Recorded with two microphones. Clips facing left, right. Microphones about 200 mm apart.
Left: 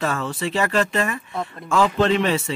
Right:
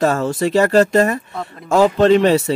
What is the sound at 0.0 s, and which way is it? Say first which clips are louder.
Speech: right 8 dB; 40° right (ahead or behind).